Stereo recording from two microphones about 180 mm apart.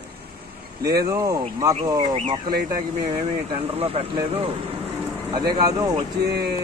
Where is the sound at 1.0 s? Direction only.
20° right (ahead or behind).